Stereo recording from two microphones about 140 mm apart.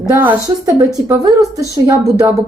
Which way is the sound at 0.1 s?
15° right (ahead or behind).